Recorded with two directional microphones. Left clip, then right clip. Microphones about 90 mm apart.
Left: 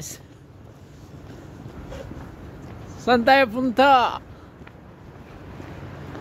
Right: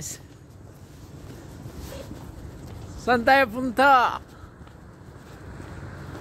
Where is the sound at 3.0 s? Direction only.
30° left (ahead or behind).